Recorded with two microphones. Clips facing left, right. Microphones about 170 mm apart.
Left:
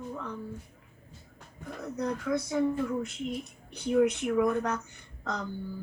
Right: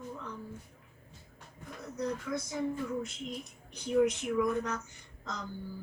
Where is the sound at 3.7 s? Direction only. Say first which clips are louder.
Left 3 dB; 60° left (ahead or behind).